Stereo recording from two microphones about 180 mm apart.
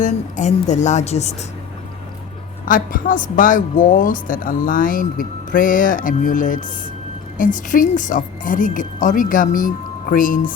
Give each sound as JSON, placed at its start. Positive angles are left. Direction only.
{"t": 0.0, "sound": "a woman's voice", "side_deg": 40}
{"t": 2.6, "sound": "a woman's voice", "side_deg": 50}